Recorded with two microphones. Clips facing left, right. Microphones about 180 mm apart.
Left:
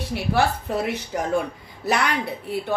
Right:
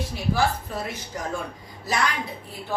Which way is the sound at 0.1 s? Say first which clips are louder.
Left 3 dB; 70° left (ahead or behind).